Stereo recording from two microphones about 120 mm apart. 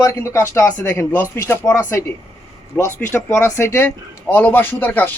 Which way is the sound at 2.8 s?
15° left (ahead or behind).